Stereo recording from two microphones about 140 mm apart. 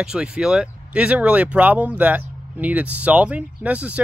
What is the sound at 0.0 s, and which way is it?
Speech, 5° right (ahead or behind).